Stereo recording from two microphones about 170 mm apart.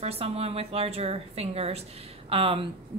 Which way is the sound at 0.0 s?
35° right (ahead or behind).